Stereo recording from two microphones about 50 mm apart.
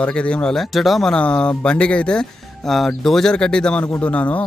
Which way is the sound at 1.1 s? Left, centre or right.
Centre.